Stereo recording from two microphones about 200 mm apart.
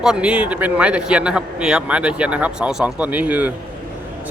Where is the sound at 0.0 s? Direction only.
5° right (ahead or behind).